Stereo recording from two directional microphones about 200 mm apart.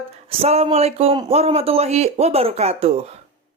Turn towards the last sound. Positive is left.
turn(degrees=-30)  # may be behind; listen again after turning